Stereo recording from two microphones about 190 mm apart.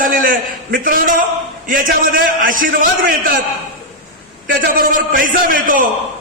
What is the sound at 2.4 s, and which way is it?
Speech, 45° right (ahead or behind).